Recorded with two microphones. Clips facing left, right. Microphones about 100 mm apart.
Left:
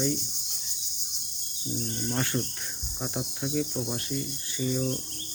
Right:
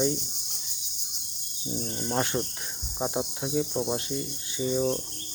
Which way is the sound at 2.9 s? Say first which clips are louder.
Right 5 dB; 25° right (ahead or behind).